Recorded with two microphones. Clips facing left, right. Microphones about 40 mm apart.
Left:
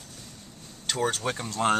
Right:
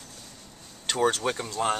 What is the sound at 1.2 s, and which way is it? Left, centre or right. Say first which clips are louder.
Speech: right 2 dB; centre.